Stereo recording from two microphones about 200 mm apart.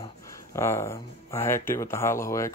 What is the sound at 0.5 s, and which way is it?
Speech, 15° left (ahead or behind).